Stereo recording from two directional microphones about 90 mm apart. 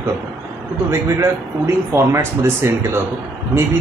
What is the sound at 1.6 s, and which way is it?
Speech, 30° right (ahead or behind).